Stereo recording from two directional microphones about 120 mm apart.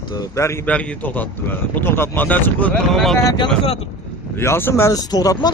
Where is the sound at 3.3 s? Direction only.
50° left (ahead or behind).